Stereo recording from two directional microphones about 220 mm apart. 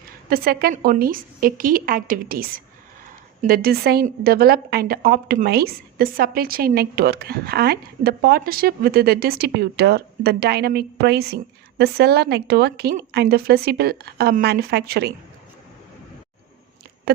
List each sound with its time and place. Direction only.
0.3 s a woman's voice: 45° right (ahead or behind)